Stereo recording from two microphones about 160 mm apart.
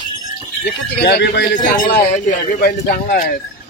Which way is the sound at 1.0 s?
90° left.